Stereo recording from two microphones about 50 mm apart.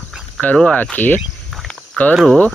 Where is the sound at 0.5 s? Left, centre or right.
Centre.